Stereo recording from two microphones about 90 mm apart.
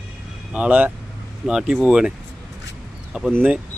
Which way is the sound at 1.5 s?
10° right (ahead or behind).